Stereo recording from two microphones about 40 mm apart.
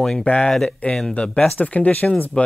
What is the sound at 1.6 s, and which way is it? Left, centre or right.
Speech, left.